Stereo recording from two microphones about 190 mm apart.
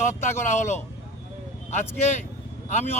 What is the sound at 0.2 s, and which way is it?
Speech, 40° left (ahead or behind).